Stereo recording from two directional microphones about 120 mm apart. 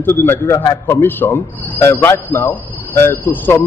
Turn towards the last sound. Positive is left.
turn(degrees=15)  # may be behind; listen again after turning